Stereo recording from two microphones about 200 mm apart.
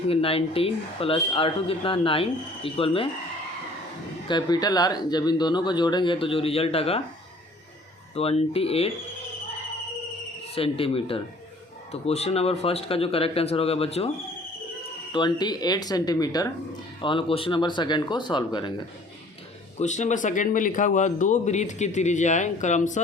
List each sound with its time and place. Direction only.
0.1 s speech: 30° left (ahead or behind)
4.3 s speech: 20° left (ahead or behind)
8.1 s speech: 30° left (ahead or behind)
10.5 s speech: 30° left (ahead or behind)
15.1 s speech: 20° left (ahead or behind)
19.8 s speech: 35° left (ahead or behind)